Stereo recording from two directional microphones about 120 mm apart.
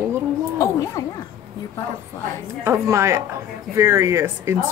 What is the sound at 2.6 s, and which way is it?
Speech, 25° right (ahead or behind).